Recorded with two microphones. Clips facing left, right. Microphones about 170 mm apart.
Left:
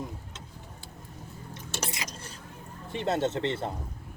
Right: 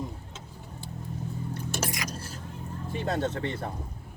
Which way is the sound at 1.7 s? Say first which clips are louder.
Right 2 dB; 25° left (ahead or behind).